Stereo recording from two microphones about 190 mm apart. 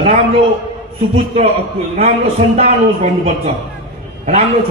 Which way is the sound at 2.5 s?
35° right (ahead or behind).